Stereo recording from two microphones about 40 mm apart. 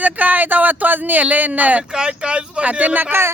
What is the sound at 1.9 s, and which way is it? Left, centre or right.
Speech, right.